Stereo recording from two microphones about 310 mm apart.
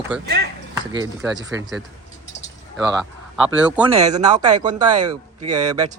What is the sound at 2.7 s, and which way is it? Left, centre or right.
Speech, centre.